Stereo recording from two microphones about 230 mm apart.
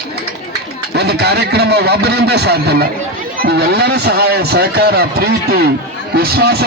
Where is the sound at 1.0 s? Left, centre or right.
Right.